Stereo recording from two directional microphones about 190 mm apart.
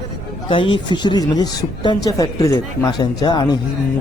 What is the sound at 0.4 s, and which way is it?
A man's voice, 25° left (ahead or behind).